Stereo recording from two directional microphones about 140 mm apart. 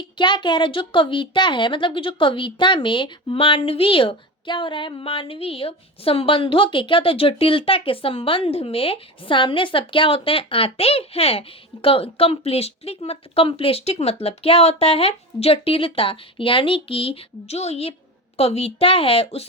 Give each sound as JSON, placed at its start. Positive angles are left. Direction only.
{"t": 0.2, "sound": "a woman's voice", "side_deg": 35}